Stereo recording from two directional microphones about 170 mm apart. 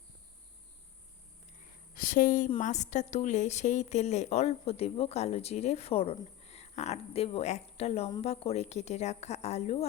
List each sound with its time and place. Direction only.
2.0 s a woman's voice: 55° left (ahead or behind)